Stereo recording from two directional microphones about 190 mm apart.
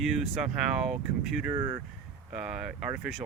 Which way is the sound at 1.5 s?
20° right (ahead or behind).